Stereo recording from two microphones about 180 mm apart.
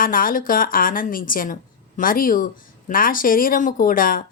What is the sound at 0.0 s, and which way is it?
A woman's voice, 50° left (ahead or behind).